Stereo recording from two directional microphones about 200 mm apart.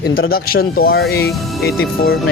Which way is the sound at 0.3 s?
50° left (ahead or behind).